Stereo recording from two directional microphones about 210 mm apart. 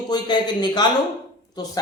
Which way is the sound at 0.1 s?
20° left (ahead or behind).